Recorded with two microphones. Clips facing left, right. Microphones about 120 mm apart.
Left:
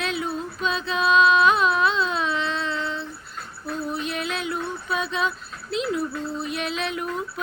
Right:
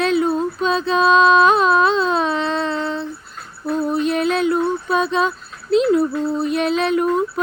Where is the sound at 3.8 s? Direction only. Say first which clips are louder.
Right 10 dB; 40° right (ahead or behind).